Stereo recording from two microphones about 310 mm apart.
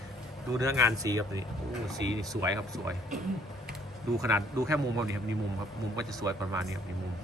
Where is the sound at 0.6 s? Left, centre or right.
Centre.